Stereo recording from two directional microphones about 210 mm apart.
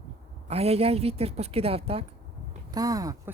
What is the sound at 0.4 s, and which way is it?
Speech, 30° right (ahead or behind).